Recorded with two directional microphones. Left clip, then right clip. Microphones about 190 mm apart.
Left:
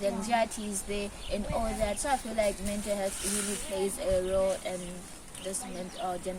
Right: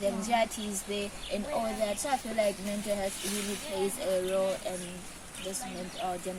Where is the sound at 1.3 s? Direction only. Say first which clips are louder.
Even; 5° left (ahead or behind).